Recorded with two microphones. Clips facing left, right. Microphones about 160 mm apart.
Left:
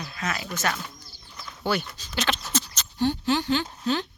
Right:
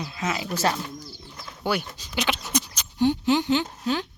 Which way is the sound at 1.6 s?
10° right (ahead or behind).